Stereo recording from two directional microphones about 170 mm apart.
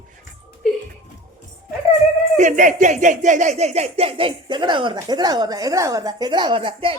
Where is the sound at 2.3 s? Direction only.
50° right (ahead or behind).